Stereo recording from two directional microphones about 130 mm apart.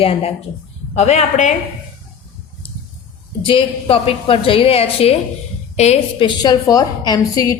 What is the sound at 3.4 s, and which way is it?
A woman's voice, 45° left (ahead or behind).